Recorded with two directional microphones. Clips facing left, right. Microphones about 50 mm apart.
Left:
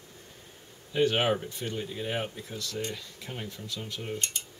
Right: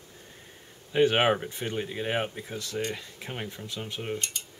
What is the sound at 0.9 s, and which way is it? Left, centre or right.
Speech, right.